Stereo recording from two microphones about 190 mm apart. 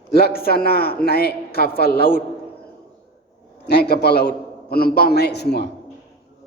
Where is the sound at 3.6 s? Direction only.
60° left (ahead or behind).